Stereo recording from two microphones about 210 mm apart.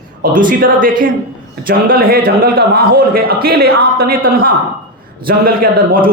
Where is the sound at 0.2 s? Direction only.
40° right (ahead or behind).